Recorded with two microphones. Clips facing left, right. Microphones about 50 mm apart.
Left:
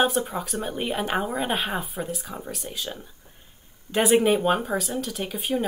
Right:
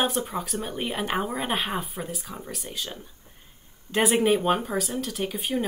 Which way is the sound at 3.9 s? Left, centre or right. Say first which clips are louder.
Left 2 dB; centre.